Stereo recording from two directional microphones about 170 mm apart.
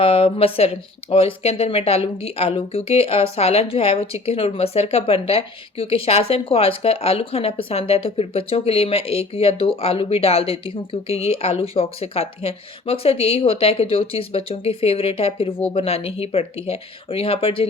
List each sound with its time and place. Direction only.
0.0 s a woman's voice: 35° left (ahead or behind)